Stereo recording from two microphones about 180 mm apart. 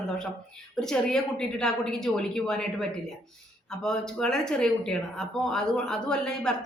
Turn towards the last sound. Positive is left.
turn(degrees=5)  # may be behind; listen again after turning